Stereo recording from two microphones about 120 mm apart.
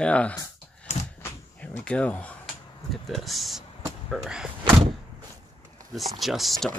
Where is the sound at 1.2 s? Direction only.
15° left (ahead or behind).